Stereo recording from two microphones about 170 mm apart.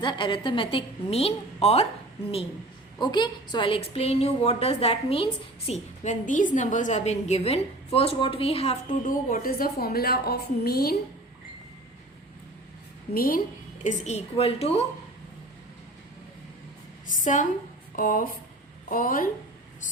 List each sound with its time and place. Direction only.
0.0 s a woman's voice: 30° left (ahead or behind)
3.0 s a woman's voice: 25° left (ahead or behind); by 10.9 s 65° left (ahead or behind)
13.1 s a woman's voice: 55° left (ahead or behind)
13.8 s a woman's voice: 40° left (ahead or behind)
17.1 s a woman's voice: 50° left (ahead or behind)